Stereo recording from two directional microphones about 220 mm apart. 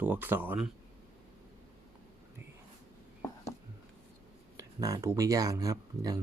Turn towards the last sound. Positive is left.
turn(degrees=-15)  # may be behind; listen again after turning